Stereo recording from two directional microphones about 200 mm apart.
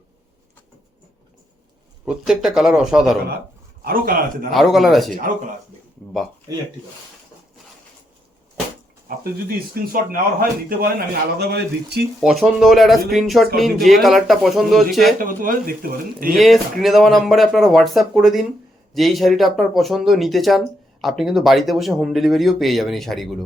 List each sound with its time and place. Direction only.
2.0 s speech: 5° right (ahead or behind)
3.8 s a man's voice: 45° right (ahead or behind)
4.5 s speech: centre (ahead or behind)
9.7 s a man's voice: 45° right (ahead or behind)
12.2 s speech: centre (ahead or behind)
15.2 s a man's voice: 45° right (ahead or behind)
16.3 s speech: centre (ahead or behind)